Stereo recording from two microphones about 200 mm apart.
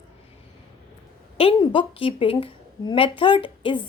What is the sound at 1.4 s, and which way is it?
A woman's voice, 25° left (ahead or behind).